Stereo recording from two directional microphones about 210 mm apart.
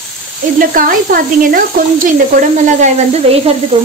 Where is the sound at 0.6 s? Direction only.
40° right (ahead or behind).